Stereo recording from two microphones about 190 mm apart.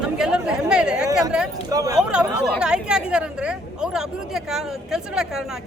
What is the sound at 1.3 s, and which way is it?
Speech, 5° right (ahead or behind).